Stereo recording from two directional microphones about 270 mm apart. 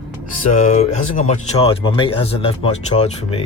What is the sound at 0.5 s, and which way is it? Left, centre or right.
Speech, left.